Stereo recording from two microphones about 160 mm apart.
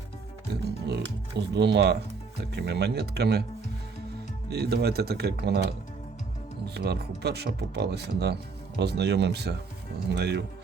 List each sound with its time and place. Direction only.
0.5 s speech: 90° right
4.4 s speech: 90° right
6.7 s speech: 90° right